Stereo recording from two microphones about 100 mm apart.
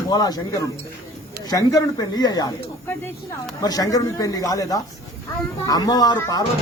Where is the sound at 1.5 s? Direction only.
40° left (ahead or behind).